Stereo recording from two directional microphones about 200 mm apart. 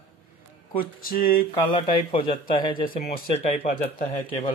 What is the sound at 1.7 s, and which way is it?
Speech, 25° left (ahead or behind).